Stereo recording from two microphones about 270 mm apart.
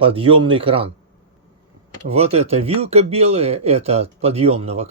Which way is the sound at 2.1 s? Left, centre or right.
Right.